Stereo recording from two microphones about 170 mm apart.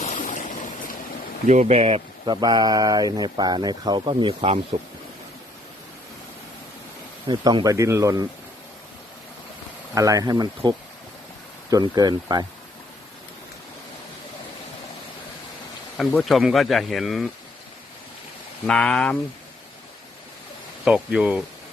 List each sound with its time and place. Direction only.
0.0 s stream: 45° left (ahead or behind)
1.5 s speech: 45° right (ahead or behind)
7.3 s speech: 25° right (ahead or behind)
9.9 s speech: 20° right (ahead or behind)
16.0 s speech: centre (ahead or behind)
18.6 s speech: 5° left (ahead or behind)
20.8 s speech: 5° right (ahead or behind)